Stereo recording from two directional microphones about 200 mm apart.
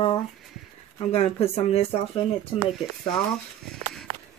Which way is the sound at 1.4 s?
30° left (ahead or behind).